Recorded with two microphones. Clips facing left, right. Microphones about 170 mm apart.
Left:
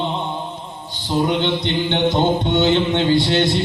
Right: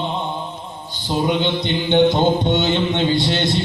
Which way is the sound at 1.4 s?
15° right (ahead or behind).